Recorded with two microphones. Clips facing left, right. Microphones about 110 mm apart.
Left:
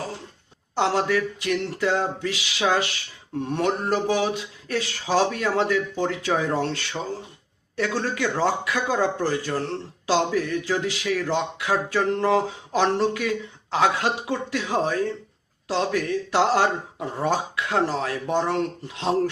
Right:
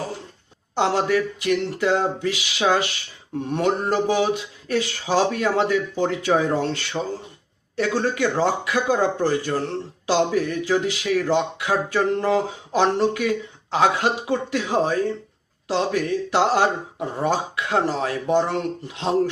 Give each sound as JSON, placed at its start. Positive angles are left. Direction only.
{"t": 0.8, "sound": "a man's voice", "side_deg": -20}